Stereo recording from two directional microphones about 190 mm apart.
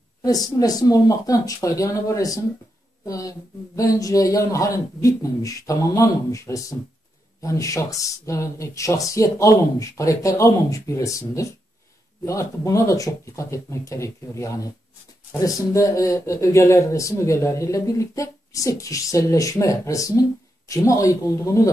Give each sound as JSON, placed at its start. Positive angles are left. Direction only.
{"t": 0.2, "sound": "speech", "side_deg": 20}